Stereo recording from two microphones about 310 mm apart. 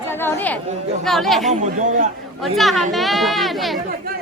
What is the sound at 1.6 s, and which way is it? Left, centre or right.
Speech, right.